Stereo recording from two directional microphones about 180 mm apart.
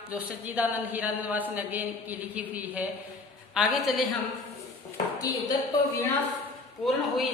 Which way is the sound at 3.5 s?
Centre (ahead or behind).